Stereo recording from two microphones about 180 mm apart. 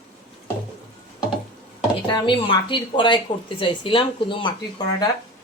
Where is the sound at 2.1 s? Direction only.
25° left (ahead or behind).